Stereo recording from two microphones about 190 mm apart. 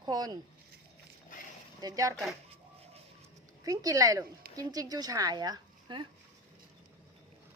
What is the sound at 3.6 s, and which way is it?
A woman's voice, 20° right (ahead or behind).